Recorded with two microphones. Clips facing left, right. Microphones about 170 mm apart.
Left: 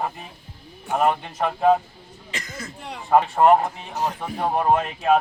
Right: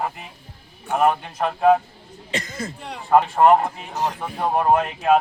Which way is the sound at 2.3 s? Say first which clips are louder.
Right 6 dB; 30° right (ahead or behind).